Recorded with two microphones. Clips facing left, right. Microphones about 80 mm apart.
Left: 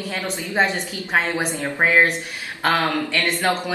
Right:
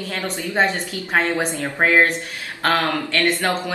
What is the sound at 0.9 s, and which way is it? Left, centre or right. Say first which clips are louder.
Speech: right 1 dB; centre.